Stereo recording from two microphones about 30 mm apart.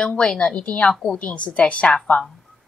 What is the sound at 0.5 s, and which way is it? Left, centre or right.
A woman's voice, left.